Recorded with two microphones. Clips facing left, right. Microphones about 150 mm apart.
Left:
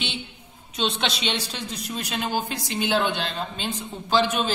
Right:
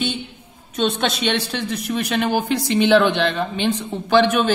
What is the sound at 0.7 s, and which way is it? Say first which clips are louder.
A woman's voice: right 6 dB; 50° right (ahead or behind).